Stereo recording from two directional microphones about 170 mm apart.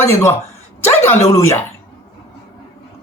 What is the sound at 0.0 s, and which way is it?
A man's voice, 15° left (ahead or behind).